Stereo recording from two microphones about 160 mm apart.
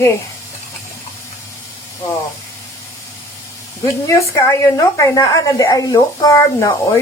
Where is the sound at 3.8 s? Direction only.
20° left (ahead or behind).